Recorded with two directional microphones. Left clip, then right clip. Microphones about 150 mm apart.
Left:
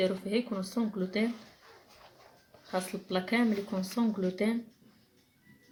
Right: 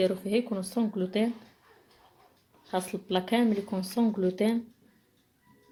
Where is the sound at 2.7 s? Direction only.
45° right (ahead or behind).